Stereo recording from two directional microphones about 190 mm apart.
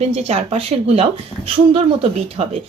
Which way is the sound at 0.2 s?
30° right (ahead or behind).